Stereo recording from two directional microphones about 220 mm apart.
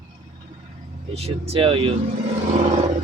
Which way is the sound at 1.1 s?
30° right (ahead or behind).